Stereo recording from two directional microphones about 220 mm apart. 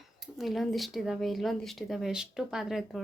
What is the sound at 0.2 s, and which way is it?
Speech, centre (ahead or behind).